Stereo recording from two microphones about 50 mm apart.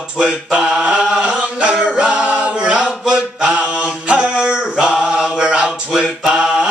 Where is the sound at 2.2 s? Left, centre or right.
Right.